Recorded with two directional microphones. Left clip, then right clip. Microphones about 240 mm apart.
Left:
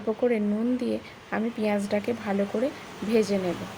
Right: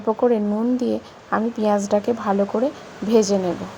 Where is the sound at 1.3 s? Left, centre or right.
Centre.